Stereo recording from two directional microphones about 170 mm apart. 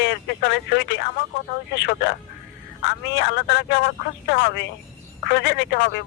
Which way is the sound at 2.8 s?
90° left.